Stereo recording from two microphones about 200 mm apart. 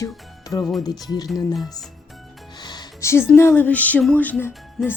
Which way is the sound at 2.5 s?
20° left (ahead or behind).